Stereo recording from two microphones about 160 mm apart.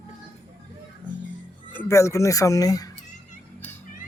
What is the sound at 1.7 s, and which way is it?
Speech, 15° left (ahead or behind).